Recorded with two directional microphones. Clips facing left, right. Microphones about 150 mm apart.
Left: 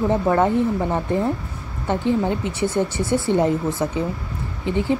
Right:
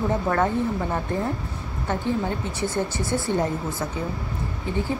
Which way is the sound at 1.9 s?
20° left (ahead or behind).